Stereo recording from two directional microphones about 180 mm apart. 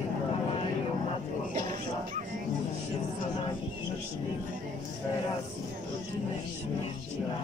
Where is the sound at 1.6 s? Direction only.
45° right (ahead or behind).